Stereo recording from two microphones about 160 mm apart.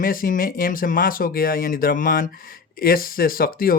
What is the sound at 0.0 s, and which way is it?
Speech, 60° left (ahead or behind).